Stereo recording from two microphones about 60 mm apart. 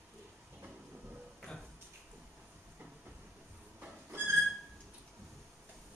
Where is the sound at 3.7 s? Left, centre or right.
Right.